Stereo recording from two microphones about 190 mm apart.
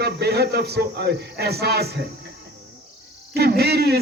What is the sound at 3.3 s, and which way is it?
Speech, 60° right (ahead or behind).